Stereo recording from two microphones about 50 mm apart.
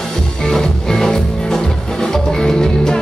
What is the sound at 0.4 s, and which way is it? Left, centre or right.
Music, centre.